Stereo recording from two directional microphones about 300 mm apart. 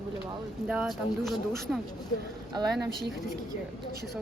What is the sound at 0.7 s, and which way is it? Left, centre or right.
Speech, centre.